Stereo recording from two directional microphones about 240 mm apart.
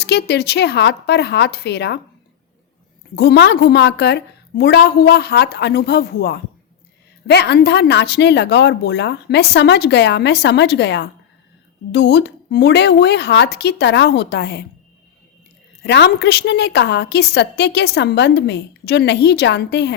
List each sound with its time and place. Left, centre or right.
0.0 s a woman's voice: left
3.2 s a woman's voice: left
15.8 s a woman's voice: left